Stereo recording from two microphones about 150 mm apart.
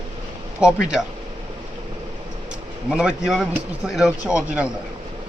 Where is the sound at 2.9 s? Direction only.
5° right (ahead or behind).